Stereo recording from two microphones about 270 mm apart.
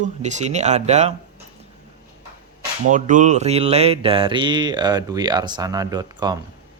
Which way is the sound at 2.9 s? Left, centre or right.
Right.